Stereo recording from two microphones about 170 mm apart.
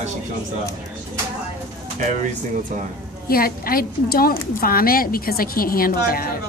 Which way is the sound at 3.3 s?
60° left (ahead or behind).